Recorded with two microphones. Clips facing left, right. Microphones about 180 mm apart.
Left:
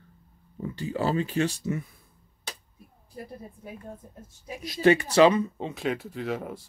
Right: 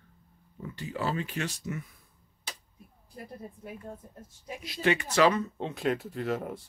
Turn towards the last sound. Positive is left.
turn(degrees=0)  # may be behind; listen again after turning